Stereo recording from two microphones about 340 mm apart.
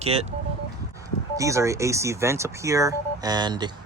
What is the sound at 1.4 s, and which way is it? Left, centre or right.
Speech, centre.